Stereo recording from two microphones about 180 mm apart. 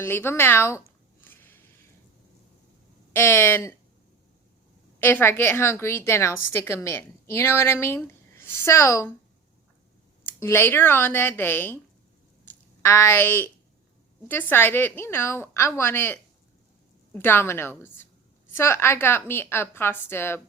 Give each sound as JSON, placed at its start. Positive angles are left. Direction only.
{"t": 0.0, "sound": "a woman's voice", "side_deg": 15}
{"t": 1.2, "sound": "a sound", "side_deg": 10}
{"t": 3.1, "sound": "a woman's voice", "side_deg": 15}
{"t": 4.9, "sound": "a woman's voice", "side_deg": 10}
{"t": 10.4, "sound": "a woman's voice", "side_deg": 15}